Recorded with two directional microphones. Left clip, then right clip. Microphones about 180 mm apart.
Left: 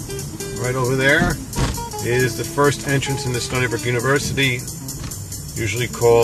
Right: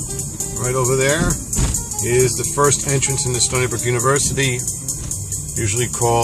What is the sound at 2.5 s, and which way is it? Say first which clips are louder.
Speech: right 1 dB; 10° right (ahead or behind).